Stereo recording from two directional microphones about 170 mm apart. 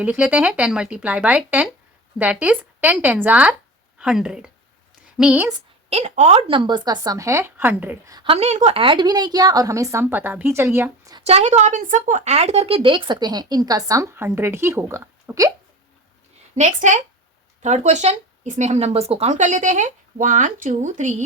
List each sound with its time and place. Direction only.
0.0 s a woman's voice: 10° right (ahead or behind)
5.9 s speech: 40° right (ahead or behind); by 8.1 s 10° right (ahead or behind)
8.1 s speech: 30° right (ahead or behind); by 11.1 s 15° right (ahead or behind)
11.2 s speech: 40° right (ahead or behind); by 15.5 s 20° right (ahead or behind)
16.6 s speech: 45° right (ahead or behind)